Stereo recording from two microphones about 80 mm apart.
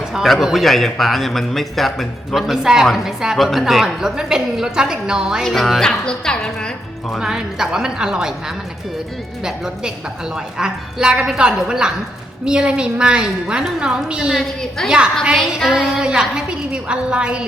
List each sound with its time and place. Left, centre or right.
0.1 s a woman's voice: centre
7.2 s a woman's voice: centre
9.4 s a woman's voice: centre